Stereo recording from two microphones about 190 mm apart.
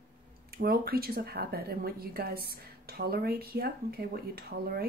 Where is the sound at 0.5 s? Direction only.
55° right (ahead or behind).